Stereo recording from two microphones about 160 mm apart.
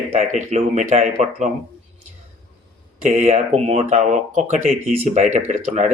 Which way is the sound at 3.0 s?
50° right (ahead or behind).